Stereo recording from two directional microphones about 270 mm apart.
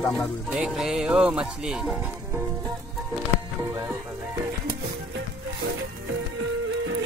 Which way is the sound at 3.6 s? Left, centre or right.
Centre.